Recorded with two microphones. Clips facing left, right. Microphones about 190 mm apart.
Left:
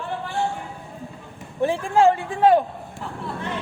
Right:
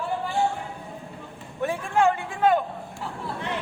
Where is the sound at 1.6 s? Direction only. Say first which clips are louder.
Left 4 dB; 30° left (ahead or behind).